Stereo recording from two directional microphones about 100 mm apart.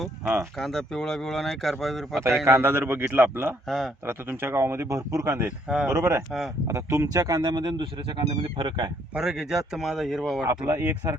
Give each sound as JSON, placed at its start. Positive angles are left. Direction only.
{"t": 0.6, "sound": "speech", "side_deg": 0}
{"t": 2.4, "sound": "speech", "side_deg": -25}
{"t": 3.7, "sound": "speech", "side_deg": 0}
{"t": 4.0, "sound": "speech", "side_deg": -20}
{"t": 5.6, "sound": "speech", "side_deg": -10}
{"t": 5.9, "sound": "speech", "side_deg": -30}
{"t": 9.1, "sound": "speech", "side_deg": -5}
{"t": 10.7, "sound": "speech", "side_deg": -25}